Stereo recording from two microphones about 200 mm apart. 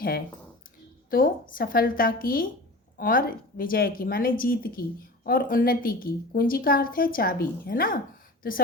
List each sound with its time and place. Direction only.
1.1 s a woman's voice: 45° left (ahead or behind)